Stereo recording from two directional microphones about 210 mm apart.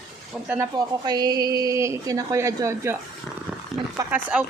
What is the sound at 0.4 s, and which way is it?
Speech, 5° right (ahead or behind).